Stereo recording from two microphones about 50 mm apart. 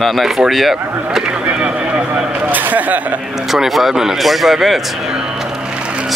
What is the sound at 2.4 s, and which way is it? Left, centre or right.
Speech, right.